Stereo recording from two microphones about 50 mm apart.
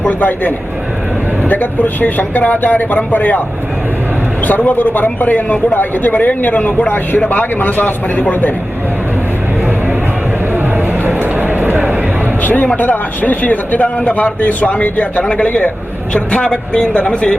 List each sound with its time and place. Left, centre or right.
0.2 s a man's voice: left
4.4 s a man's voice: left
11.0 s a sound: right
12.4 s music: left
12.7 s a man's voice: left